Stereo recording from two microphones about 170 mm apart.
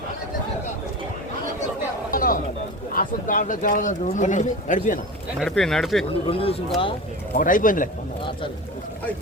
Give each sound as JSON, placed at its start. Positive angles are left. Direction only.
{"t": 2.1, "sound": "a sound", "side_deg": 55}
{"t": 2.9, "sound": "speech", "side_deg": 55}
{"t": 5.4, "sound": "speech", "side_deg": 5}
{"t": 6.2, "sound": "speech", "side_deg": 35}
{"t": 7.3, "sound": "speech", "side_deg": 50}